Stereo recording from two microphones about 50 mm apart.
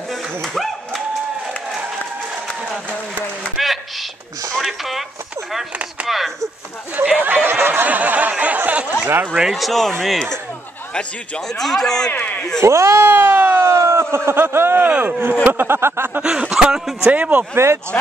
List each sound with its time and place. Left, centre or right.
0.1 s dog: centre
3.5 s a sound: centre
6.0 s speech: centre
7.0 s a sound: right
9.0 s speech: right
9.5 s speech: centre
11.4 s speech: centre
12.1 s a man's voice: left
12.6 s speech: right
13.1 s siren: right
13.7 s a sound: right
14.8 s speech: right
16.2 s speech: right
17.1 s speech: right